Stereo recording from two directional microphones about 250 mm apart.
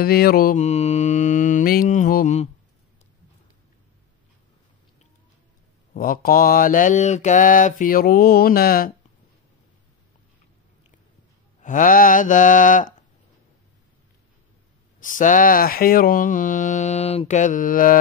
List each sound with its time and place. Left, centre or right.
0.0 s mantra: left
5.9 s speech: left
11.6 s speech: left
15.0 s speech: left